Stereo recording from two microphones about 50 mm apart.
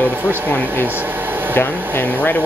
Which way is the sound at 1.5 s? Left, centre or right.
Left.